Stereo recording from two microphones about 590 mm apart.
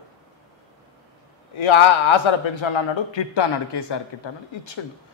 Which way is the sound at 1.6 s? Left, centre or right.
Left.